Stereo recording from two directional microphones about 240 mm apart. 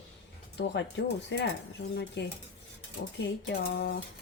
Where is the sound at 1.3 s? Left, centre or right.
Left.